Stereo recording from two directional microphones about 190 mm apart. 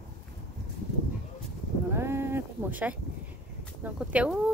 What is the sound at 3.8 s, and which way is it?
Speech, 5° right (ahead or behind).